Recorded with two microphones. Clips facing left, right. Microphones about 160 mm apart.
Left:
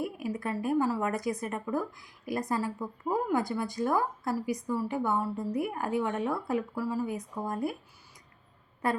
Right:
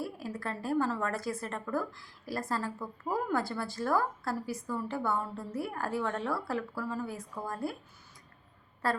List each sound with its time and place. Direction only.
0.0 s a woman's voice: 15° left (ahead or behind)
8.8 s a woman's voice: 20° left (ahead or behind)